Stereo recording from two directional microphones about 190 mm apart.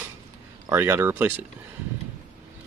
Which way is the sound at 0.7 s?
10° right (ahead or behind).